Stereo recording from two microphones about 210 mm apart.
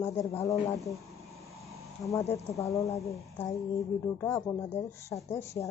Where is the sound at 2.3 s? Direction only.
15° left (ahead or behind).